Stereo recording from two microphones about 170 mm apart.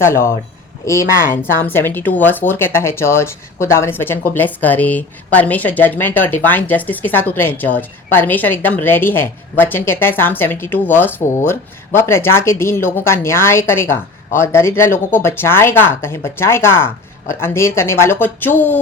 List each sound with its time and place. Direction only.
0.0 s speech: 15° left (ahead or behind)